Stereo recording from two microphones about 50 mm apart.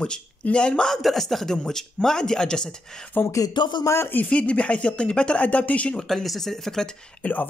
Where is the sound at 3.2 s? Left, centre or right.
Left.